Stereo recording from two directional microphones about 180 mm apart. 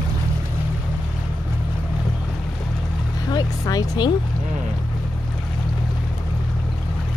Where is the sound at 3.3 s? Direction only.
20° left (ahead or behind).